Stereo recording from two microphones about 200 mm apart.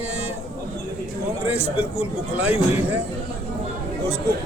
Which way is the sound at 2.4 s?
10° right (ahead or behind).